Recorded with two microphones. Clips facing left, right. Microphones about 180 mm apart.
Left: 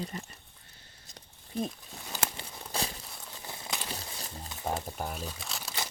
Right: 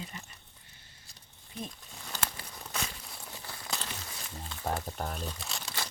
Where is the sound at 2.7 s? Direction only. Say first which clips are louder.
Left 4 dB; 30° left (ahead or behind).